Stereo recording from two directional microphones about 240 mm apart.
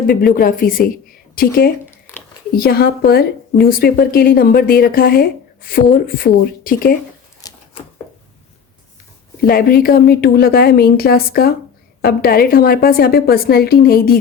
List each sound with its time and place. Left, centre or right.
0.1 s a woman's voice: left
7.4 s a sound: centre
9.4 s a woman's voice: left